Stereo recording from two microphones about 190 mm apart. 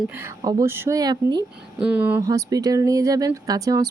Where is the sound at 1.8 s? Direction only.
5° right (ahead or behind).